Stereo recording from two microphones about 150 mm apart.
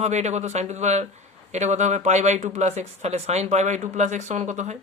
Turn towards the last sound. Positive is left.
turn(degrees=-50)  # may be behind; listen again after turning